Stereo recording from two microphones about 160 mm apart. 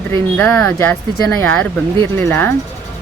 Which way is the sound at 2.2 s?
15° left (ahead or behind).